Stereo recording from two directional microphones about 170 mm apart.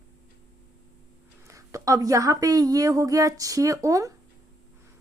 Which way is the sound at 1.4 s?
20° right (ahead or behind).